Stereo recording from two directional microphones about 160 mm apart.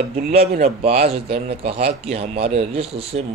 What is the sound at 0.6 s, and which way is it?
Speech, 40° right (ahead or behind).